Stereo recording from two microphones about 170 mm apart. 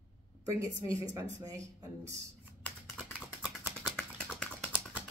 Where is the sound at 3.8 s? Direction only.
5° left (ahead or behind).